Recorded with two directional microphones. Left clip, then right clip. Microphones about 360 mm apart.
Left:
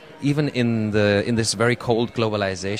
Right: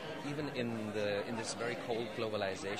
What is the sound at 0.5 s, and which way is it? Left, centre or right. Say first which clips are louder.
Speech: left 15 dB; left.